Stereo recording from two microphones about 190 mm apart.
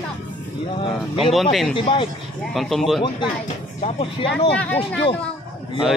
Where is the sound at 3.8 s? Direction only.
30° left (ahead or behind).